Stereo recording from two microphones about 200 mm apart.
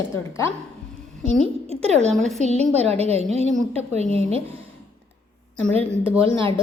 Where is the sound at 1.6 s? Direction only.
30° right (ahead or behind).